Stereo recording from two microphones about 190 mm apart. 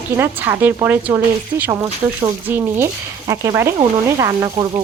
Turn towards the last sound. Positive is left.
turn(degrees=-20)  # may be behind; listen again after turning